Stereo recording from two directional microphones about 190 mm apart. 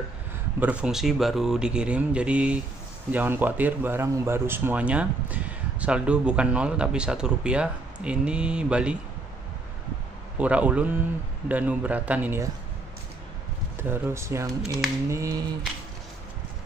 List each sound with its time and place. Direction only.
0.6 s speech: 5° right (ahead or behind)
10.3 s speech: 5° right (ahead or behind)
13.8 s speech: 10° right (ahead or behind)